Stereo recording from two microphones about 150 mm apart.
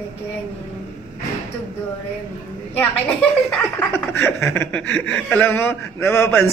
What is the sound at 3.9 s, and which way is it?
Speech, 15° left (ahead or behind).